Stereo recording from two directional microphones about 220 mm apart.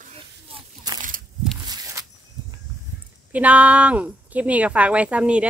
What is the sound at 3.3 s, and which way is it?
A woman's voice, 5° right (ahead or behind).